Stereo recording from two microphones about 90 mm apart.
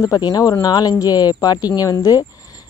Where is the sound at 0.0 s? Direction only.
45° left (ahead or behind).